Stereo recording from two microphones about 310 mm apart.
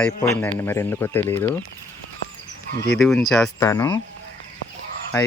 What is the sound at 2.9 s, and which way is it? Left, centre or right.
Speech, centre.